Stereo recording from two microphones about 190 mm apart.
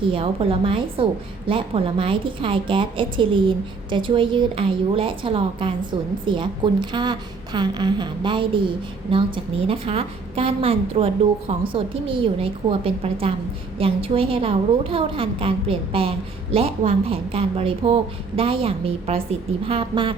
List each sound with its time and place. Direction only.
0.1 s a woman's voice: 30° right (ahead or behind)